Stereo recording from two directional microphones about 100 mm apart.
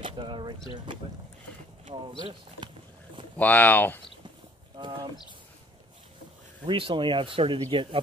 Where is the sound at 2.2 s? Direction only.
50° right (ahead or behind).